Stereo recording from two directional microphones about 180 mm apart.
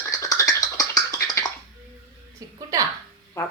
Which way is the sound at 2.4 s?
20° right (ahead or behind).